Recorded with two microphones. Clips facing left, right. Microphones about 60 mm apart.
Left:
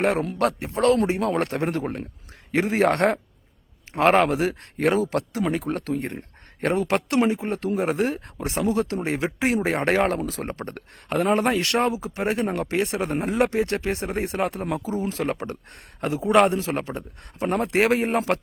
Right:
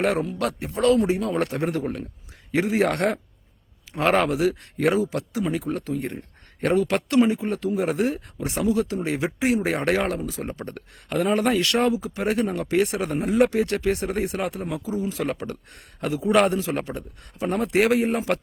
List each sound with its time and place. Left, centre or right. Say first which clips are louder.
0.3 s a man's voice: left 3 dB; left
5.1 s a man's voice: left 2 dB; left
10.2 s a man's voice: left 1 dB; left
14.8 s speech: even; left
15.2 s a man's voice: left 1 dB; left